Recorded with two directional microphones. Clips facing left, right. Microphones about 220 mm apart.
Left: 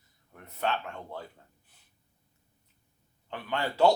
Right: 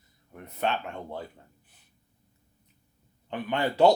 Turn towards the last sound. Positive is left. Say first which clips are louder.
# right 3 dB
turn(degrees=-20)  # may be behind; listen again after turning